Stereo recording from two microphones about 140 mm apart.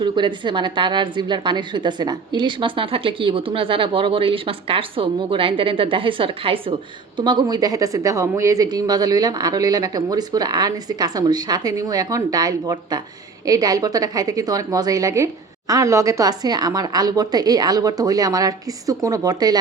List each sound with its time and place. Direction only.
0.0 s a woman's voice: 35° right (ahead or behind)